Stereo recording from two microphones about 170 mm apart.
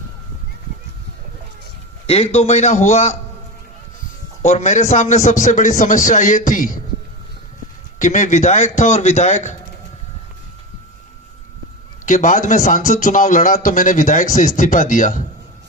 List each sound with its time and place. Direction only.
2.0 s a man's voice: 35° left (ahead or behind)
4.4 s a man's voice: 45° left (ahead or behind)
7.9 s a man's voice: 45° left (ahead or behind)
12.0 s a man's voice: 45° left (ahead or behind)